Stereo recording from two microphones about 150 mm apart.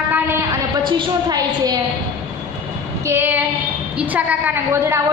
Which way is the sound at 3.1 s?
15° right (ahead or behind).